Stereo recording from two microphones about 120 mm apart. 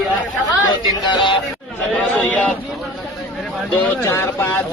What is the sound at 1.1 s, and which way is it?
Speech, 40° left (ahead or behind).